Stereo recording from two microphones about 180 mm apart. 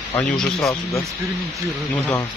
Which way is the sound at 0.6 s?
15° left (ahead or behind).